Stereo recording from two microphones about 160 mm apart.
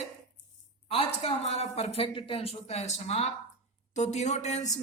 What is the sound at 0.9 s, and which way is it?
Speech, 40° left (ahead or behind).